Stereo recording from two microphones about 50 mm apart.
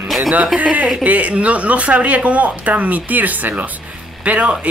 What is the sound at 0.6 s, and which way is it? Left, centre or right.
Speech, right.